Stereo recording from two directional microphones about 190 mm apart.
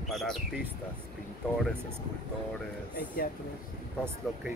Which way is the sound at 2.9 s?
50° left (ahead or behind).